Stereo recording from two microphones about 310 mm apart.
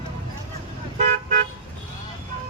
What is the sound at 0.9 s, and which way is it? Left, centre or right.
Car, right.